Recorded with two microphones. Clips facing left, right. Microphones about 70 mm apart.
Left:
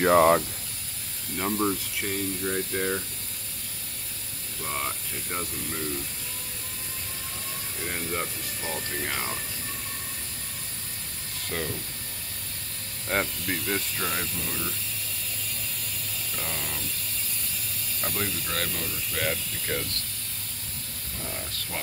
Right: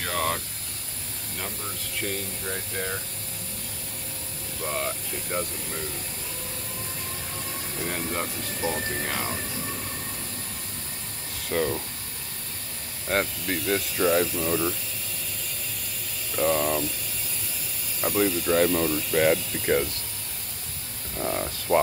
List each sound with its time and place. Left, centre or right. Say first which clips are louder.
0.0 s speech: left 10 dB; left
2.0 s speech: left 2 dB; centre
4.6 s speech: right 2 dB; centre
7.9 s speech: right 1 dB; centre
8.6 s speech: right 6 dB; right
9.0 s speech: right 2 dB; centre
11.4 s speech: right 7 dB; centre
13.1 s speech: right 2 dB; centre
16.3 s speech: right 13 dB; centre
18.0 s speech: right 9 dB; centre